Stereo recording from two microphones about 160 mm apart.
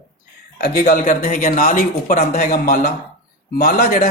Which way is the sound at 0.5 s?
70° left (ahead or behind).